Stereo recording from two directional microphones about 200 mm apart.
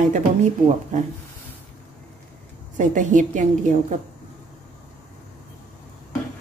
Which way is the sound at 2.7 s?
40° right (ahead or behind).